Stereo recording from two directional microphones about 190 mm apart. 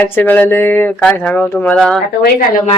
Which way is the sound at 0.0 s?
10° left (ahead or behind).